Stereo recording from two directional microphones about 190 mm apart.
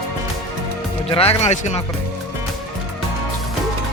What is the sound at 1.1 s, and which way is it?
Speech, 30° left (ahead or behind).